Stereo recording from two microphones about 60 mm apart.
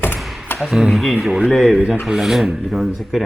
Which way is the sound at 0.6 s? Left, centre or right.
Centre.